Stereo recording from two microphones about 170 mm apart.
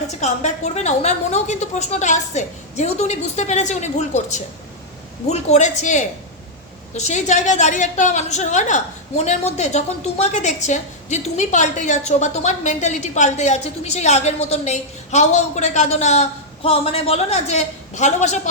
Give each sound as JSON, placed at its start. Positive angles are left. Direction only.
{"t": 0.2, "sound": "a woman's voice", "side_deg": 40}